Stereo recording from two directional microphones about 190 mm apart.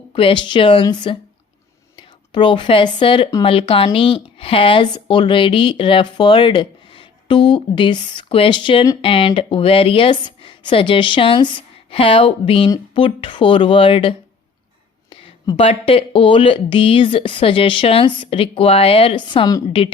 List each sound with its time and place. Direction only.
0.1 s speech: 25° left (ahead or behind)